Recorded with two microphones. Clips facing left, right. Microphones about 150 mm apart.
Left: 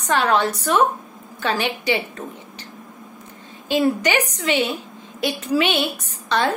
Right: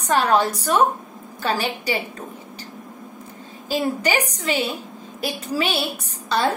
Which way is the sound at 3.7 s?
35° right (ahead or behind).